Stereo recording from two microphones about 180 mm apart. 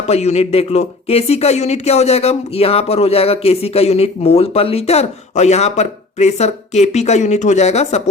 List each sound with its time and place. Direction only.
0.1 s speech: 35° left (ahead or behind)